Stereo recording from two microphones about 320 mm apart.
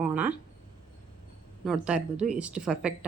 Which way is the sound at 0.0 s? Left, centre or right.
Centre.